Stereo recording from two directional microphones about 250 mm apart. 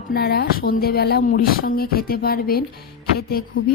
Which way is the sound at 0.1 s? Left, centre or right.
Left.